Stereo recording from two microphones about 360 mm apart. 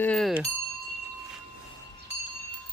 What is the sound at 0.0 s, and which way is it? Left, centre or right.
Bicycle bell, centre.